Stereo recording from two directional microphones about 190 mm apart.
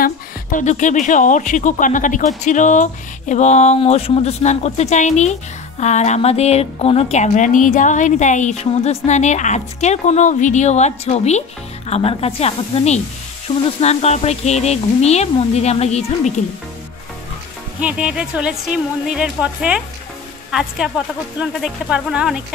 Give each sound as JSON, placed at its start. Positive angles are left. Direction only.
{"t": 0.0, "sound": "a woman's voice", "side_deg": 45}
{"t": 17.7, "sound": "speech", "side_deg": -5}